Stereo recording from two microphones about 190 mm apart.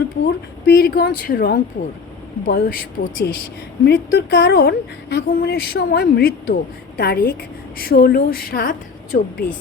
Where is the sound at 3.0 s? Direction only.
60° left (ahead or behind).